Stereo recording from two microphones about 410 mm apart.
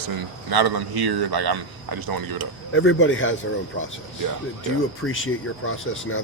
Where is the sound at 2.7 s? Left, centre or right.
Left.